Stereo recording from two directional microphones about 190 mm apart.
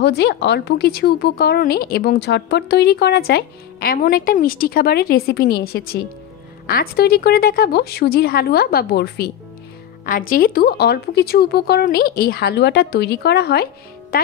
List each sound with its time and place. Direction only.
0.0 s a woman's voice: 60° left (ahead or behind)
10.0 s a woman's voice: 45° left (ahead or behind)